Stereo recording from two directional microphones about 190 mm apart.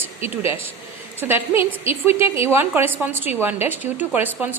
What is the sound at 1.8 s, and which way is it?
A woman's voice, 10° right (ahead or behind).